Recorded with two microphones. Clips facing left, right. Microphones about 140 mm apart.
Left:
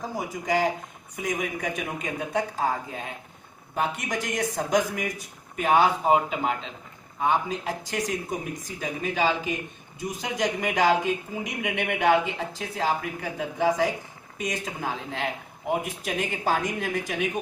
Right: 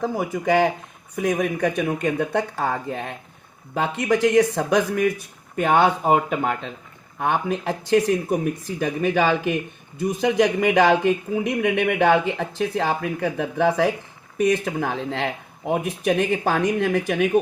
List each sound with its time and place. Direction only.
0.0 s speech: 65° right (ahead or behind)